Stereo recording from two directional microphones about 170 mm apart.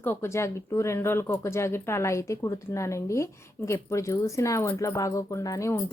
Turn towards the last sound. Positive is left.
turn(degrees=20)  # may be behind; listen again after turning